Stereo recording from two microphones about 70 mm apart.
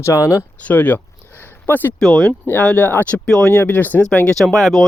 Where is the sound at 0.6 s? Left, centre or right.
Left.